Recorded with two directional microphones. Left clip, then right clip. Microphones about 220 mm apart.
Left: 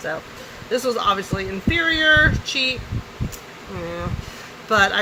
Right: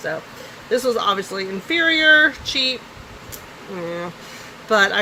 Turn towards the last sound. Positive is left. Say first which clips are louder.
# right 1 dB
turn(degrees=-20)  # may be behind; listen again after turning